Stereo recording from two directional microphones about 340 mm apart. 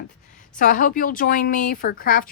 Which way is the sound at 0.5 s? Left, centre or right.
Left.